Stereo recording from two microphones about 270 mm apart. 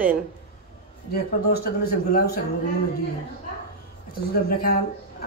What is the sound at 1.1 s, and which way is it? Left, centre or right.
Speech, left.